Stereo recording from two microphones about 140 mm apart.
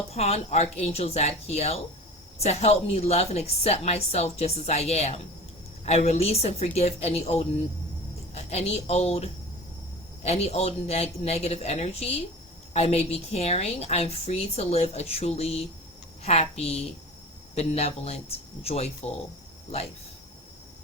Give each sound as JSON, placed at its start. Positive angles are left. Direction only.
{"t": 0.1, "sound": "a woman's voice", "side_deg": 45}